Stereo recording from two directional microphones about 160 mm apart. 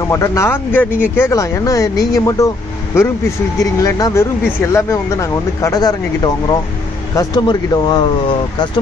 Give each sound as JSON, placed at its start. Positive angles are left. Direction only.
{"t": 0.0, "sound": "speech", "side_deg": 20}